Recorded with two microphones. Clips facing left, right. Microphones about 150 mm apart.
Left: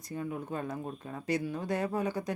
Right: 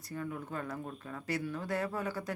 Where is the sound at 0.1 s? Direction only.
20° left (ahead or behind).